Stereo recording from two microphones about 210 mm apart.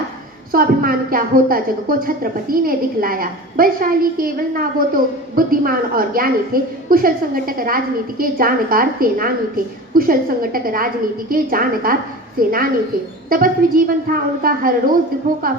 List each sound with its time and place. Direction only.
0.5 s a woman's voice: 45° right (ahead or behind)